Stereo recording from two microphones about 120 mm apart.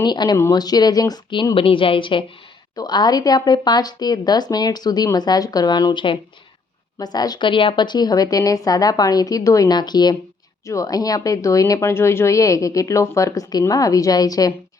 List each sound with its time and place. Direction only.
0.0 s a woman's voice: 35° left (ahead or behind)